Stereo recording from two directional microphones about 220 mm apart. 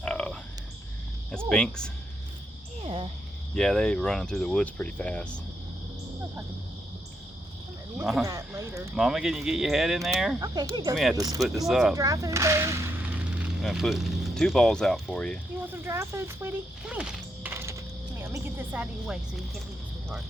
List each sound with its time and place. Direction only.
0.0 s frog: 5° left (ahead or behind)
1.5 s speech: 5° left (ahead or behind)
2.8 s speech: 25° right (ahead or behind)
3.5 s speech: 5° left (ahead or behind)
7.9 s speech: centre (ahead or behind)
8.2 s speech: 15° right (ahead or behind)
9.0 s speech: centre (ahead or behind)
10.4 s speech: 15° right (ahead or behind)
11.6 s speech: centre (ahead or behind)
11.9 s speech: 15° right (ahead or behind); by 15.4 s 5° left (ahead or behind)
15.6 s speech: 10° right (ahead or behind)